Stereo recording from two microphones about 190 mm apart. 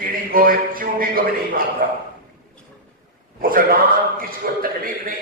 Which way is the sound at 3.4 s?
50° right (ahead or behind).